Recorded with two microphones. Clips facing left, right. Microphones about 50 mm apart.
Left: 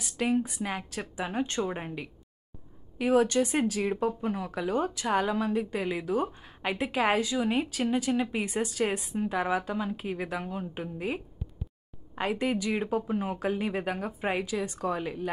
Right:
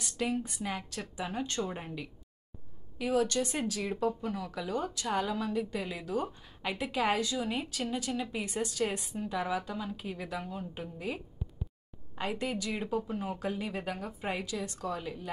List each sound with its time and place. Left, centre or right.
0.2 s a woman's voice: centre
12.2 s speech: centre